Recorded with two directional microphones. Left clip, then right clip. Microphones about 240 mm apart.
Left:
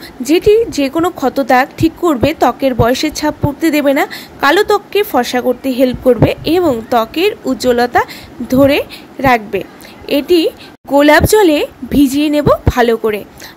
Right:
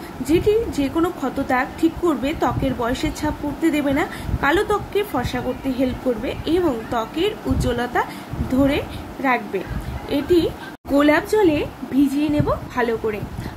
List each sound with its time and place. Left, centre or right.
0.2 s a woman's voice: left